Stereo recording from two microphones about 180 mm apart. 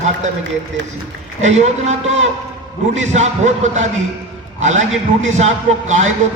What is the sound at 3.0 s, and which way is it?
A man's voice, 40° right (ahead or behind).